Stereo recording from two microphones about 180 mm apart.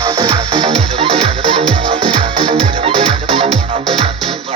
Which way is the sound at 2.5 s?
40° right (ahead or behind).